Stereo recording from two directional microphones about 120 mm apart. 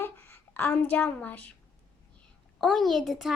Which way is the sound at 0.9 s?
10° left (ahead or behind).